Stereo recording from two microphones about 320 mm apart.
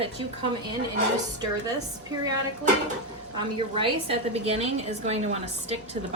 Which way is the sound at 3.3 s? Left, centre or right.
Centre.